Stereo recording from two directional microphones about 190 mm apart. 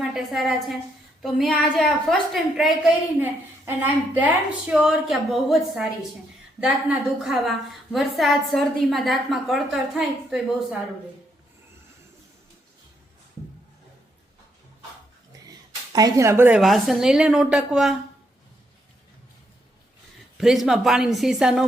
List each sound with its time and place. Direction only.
0.0 s a woman's voice: centre (ahead or behind)
15.9 s speech: 20° right (ahead or behind)
16.6 s a woman's voice: centre (ahead or behind)
20.4 s a woman's voice: centre (ahead or behind)